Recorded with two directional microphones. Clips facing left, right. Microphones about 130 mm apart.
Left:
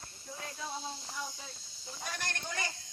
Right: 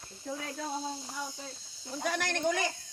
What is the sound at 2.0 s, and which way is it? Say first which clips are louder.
Speech: right 10 dB; 90° right.